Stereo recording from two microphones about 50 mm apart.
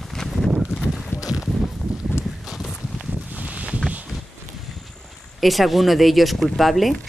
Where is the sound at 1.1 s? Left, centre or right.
Left.